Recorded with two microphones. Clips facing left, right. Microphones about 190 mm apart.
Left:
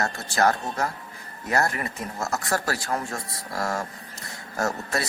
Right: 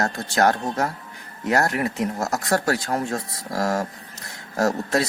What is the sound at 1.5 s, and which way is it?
Speech, 70° right (ahead or behind).